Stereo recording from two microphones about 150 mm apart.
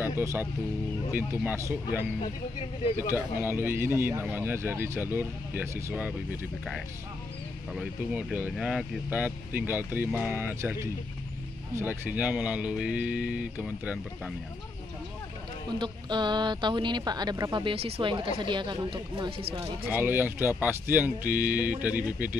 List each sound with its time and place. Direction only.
0.2 s speech: 20° right (ahead or behind)
3.2 s speech: 15° right (ahead or behind)
7.7 s speech: 5° right (ahead or behind)
15.8 s a woman's voice: 30° right (ahead or behind)
17.7 s speech: 40° right (ahead or behind)
19.9 s speech: 15° right (ahead or behind)